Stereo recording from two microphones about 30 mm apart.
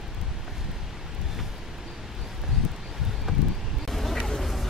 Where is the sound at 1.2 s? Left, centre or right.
Centre.